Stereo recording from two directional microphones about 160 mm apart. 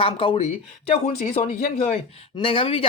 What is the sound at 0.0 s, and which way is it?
Speech, 35° left (ahead or behind).